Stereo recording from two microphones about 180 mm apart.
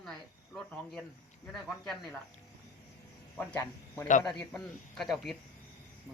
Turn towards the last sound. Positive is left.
turn(degrees=0)  # may be behind; listen again after turning